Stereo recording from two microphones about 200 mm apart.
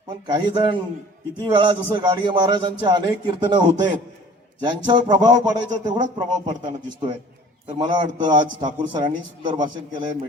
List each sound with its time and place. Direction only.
0.3 s a man's voice: 20° right (ahead or behind)